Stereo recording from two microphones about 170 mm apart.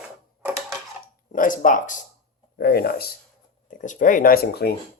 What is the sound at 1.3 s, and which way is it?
Speech, 50° left (ahead or behind).